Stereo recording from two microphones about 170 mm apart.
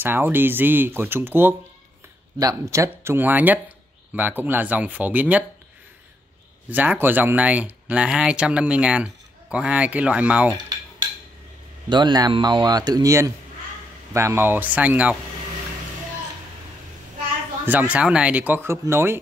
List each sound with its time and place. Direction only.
0.0 s speech: 10° right (ahead or behind)
6.7 s speech: 10° right (ahead or behind)
11.9 s speech: 25° right (ahead or behind); by 15.1 s 10° right (ahead or behind)
17.6 s speech: 10° right (ahead or behind)